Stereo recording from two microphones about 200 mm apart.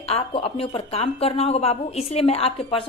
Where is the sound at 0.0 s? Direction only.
30° left (ahead or behind).